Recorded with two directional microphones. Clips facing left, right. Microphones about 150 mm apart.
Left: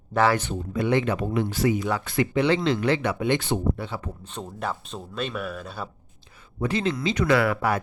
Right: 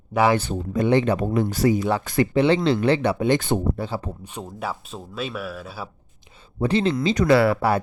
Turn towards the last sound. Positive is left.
turn(degrees=-30)  # may be behind; listen again after turning